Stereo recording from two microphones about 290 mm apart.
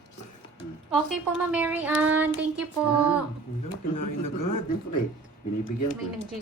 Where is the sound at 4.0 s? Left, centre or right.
Left.